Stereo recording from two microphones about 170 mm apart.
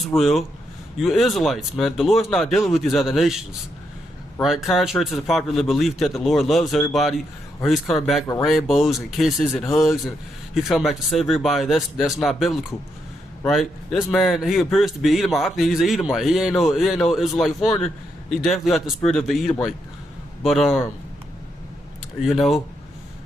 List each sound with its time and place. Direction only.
0.2 s a man's voice: centre (ahead or behind)
22.2 s a man's voice: centre (ahead or behind)